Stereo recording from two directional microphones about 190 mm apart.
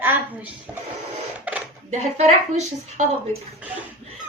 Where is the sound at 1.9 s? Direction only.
35° right (ahead or behind).